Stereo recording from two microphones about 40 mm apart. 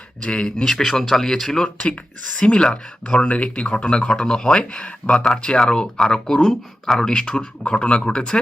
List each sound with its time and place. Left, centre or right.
0.2 s speech: left
0.4 s speech: centre
2.4 s speech: left
5.1 s speech: centre
5.5 s speech: left
7.7 s speech: left